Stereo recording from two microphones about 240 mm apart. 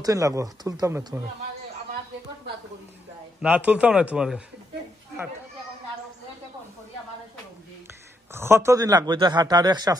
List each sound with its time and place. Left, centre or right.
0.0 s speech: centre
3.3 s a man's voice: centre
8.3 s speech: centre